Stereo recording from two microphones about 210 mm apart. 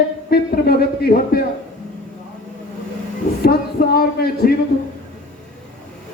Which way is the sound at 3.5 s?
45° left (ahead or behind).